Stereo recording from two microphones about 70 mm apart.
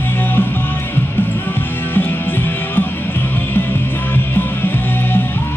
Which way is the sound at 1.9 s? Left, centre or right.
Left.